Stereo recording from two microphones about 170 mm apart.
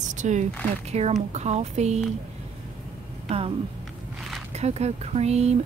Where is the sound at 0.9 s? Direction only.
40° right (ahead or behind).